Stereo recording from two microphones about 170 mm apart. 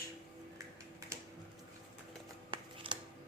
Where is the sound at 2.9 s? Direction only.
30° right (ahead or behind).